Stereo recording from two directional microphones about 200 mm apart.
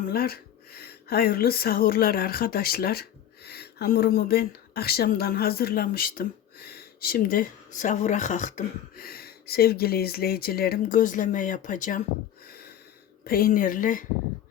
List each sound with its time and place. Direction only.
0.0 s speech: 50° left (ahead or behind)
12.5 s a sound: 50° left (ahead or behind)
13.2 s speech: 45° left (ahead or behind)